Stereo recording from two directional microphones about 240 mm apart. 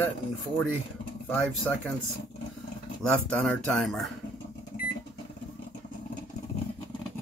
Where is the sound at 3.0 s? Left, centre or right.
Centre.